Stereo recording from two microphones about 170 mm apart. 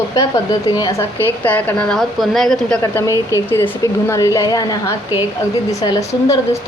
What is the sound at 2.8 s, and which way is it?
A woman's voice, 20° left (ahead or behind).